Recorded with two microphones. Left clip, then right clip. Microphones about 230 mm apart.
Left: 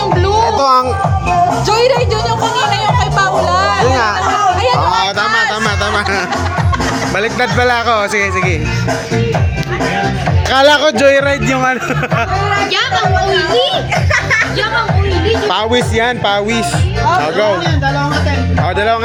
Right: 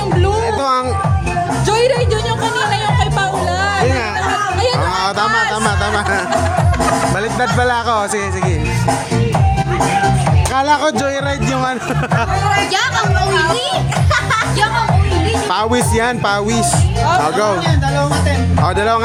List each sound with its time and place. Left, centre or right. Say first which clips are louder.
0.4 s music: left 5 dB; centre
4.9 s a sound: left 2 dB; centre
7.6 s music: left 4 dB; centre
10.5 s music: left 6 dB; centre
15.4 s speech: left 2 dB; centre